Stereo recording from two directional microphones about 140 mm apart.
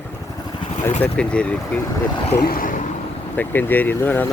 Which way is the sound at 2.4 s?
85° left.